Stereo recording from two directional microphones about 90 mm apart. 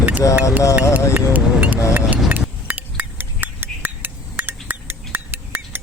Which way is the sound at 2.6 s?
20° right (ahead or behind).